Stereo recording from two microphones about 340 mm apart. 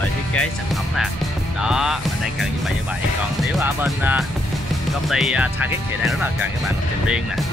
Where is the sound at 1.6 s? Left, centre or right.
Centre.